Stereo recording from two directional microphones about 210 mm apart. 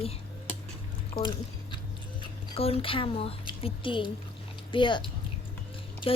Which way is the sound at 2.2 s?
25° left (ahead or behind).